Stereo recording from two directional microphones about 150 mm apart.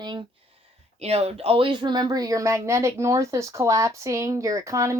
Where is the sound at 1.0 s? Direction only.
45° right (ahead or behind).